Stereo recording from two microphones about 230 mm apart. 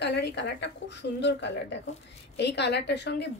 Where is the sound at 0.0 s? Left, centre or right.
Left.